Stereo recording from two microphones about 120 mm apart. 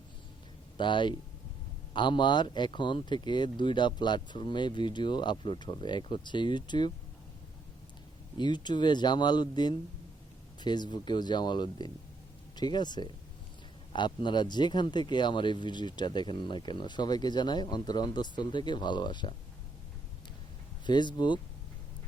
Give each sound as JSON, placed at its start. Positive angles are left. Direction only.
{"t": 0.8, "sound": "speech", "side_deg": 40}
{"t": 8.4, "sound": "speech", "side_deg": 40}
{"t": 20.8, "sound": "speech", "side_deg": 40}